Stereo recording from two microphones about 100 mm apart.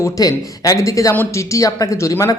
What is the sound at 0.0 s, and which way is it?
Speech, 40° left (ahead or behind).